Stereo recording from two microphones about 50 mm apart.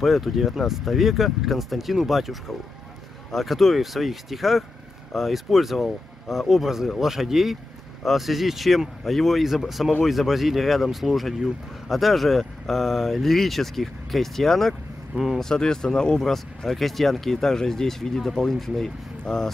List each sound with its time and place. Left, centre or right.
0.0 s speech: centre